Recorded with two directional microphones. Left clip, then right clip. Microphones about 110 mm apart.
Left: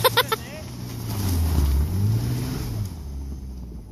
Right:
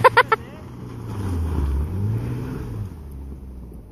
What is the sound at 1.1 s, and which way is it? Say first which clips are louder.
Vehicle: left 1 dB; 30° left (ahead or behind).